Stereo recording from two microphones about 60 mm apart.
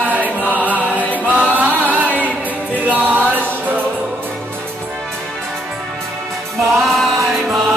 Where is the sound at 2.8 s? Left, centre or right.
Right.